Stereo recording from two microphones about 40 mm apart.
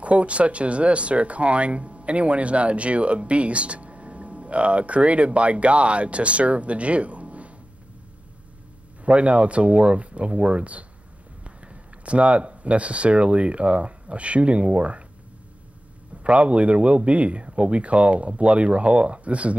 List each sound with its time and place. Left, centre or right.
0.0 s speech: right
9.0 s speech: right
16.2 s speech: right